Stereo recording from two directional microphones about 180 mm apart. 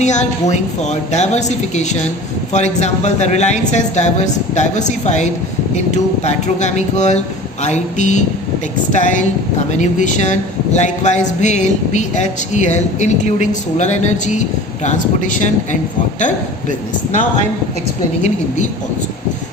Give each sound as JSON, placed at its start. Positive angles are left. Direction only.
{"t": 0.0, "sound": "speech", "side_deg": 40}
{"t": 18.2, "sound": "speech", "side_deg": 40}